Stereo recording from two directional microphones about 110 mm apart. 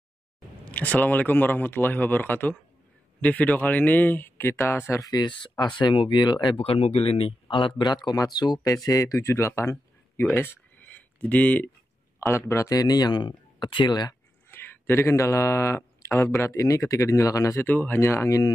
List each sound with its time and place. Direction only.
0.7 s speech: 15° left (ahead or behind)
5.0 s speech: 35° left (ahead or behind)
5.3 s speech: 45° left (ahead or behind)
6.6 s speech: 65° left (ahead or behind); by 11.7 s 15° left (ahead or behind)
12.2 s speech: 25° left (ahead or behind)
14.5 s speech: 20° left (ahead or behind)